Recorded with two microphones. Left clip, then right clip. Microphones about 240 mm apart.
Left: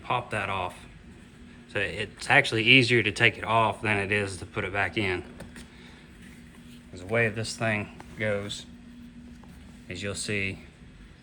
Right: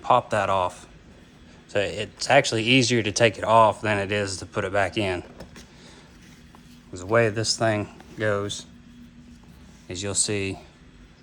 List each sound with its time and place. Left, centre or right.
0.0 s speech: centre
1.7 s speech: centre
6.9 s speech: right
9.9 s speech: centre